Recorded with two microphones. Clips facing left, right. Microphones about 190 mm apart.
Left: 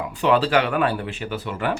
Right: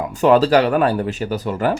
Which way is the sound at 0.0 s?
45° right (ahead or behind).